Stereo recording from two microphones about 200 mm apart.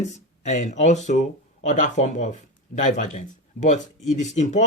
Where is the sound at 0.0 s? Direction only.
35° left (ahead or behind).